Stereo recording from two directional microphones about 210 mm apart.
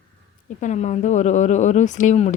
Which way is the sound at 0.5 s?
35° left (ahead or behind).